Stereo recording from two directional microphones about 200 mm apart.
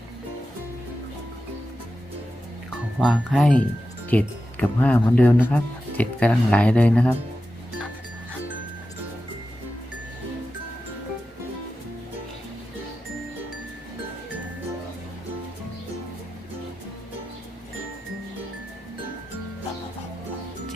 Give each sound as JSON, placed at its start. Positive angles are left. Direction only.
{"t": 3.0, "sound": "speech", "side_deg": 0}